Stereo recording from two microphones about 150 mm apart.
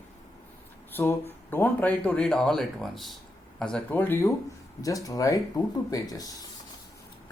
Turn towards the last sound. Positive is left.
turn(degrees=25)  # may be behind; listen again after turning